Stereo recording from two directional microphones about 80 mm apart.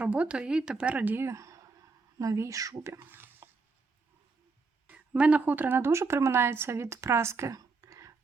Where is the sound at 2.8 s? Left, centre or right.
Right.